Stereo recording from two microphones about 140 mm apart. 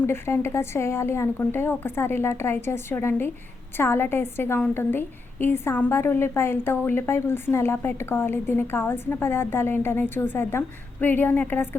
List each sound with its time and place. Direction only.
0.0 s a woman's voice: 15° left (ahead or behind)